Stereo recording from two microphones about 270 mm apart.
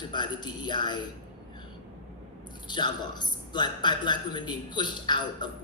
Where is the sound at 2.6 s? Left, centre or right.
Centre.